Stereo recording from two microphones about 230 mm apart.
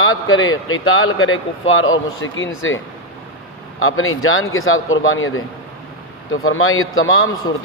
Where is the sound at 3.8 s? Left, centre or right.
Left.